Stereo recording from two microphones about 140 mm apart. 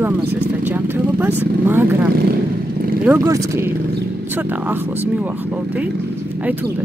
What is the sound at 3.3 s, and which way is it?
Speech, 20° right (ahead or behind).